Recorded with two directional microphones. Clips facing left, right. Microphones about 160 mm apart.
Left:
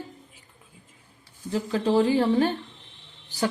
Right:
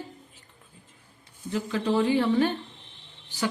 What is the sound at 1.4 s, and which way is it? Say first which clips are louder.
Speech: left 2 dB; 35° left (ahead or behind).